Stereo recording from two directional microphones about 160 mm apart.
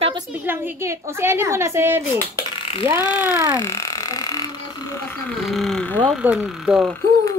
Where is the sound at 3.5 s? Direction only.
20° left (ahead or behind).